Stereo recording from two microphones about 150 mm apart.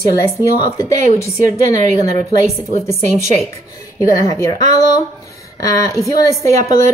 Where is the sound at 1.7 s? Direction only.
50° right (ahead or behind).